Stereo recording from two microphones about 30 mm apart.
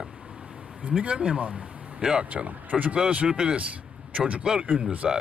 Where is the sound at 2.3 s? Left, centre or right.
Right.